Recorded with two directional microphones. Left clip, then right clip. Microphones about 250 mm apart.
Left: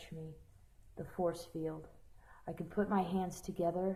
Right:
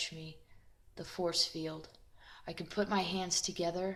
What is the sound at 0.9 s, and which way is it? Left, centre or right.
A woman's voice, right.